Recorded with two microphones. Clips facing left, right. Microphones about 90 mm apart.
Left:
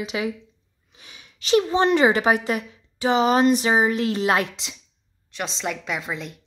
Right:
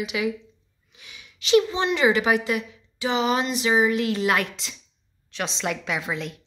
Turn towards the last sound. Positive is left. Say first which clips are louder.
# right 1 dB
turn(degrees=0)  # may be behind; listen again after turning